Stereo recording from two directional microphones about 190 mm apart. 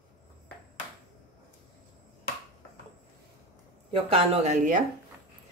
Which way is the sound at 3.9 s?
30° right (ahead or behind).